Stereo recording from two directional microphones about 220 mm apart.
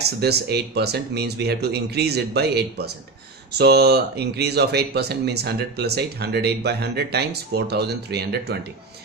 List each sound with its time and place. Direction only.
0.0 s speech: 45° right (ahead or behind)